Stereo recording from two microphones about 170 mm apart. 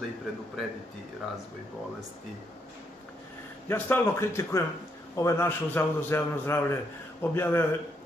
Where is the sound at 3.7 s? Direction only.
15° left (ahead or behind).